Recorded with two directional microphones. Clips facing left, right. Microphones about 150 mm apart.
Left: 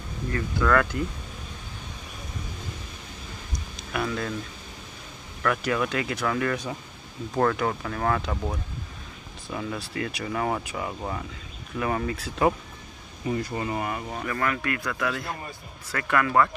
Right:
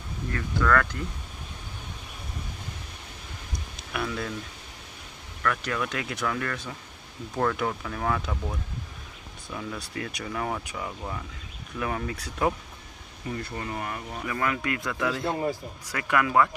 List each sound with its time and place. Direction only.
0.3 s speech: 10° left (ahead or behind)
3.5 s a sound: centre (ahead or behind)
5.4 s speech: 10° left (ahead or behind)
9.5 s speech: 5° left (ahead or behind)
14.2 s speech: 15° right (ahead or behind)
15.9 s speech: 15° right (ahead or behind)